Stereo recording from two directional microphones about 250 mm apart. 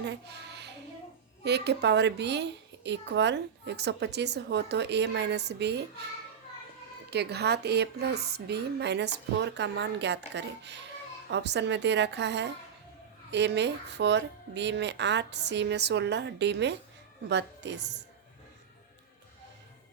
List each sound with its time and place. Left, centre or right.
0.0 s a sound: right
1.5 s a woman's voice: right
7.1 s a woman's voice: right